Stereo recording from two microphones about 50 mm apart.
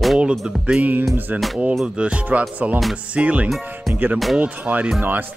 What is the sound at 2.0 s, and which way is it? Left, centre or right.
Music, right.